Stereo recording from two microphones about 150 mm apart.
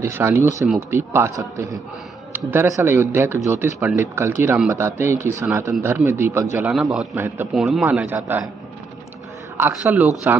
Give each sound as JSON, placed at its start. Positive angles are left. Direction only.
{"t": 0.0, "sound": "a man's voice", "side_deg": -15}
{"t": 7.2, "sound": "a man's voice", "side_deg": -15}
{"t": 7.5, "sound": "a man's voice", "side_deg": 0}
{"t": 9.6, "sound": "a man's voice", "side_deg": -15}